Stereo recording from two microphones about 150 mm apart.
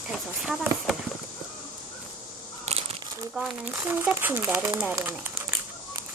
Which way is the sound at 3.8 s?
15° right (ahead or behind).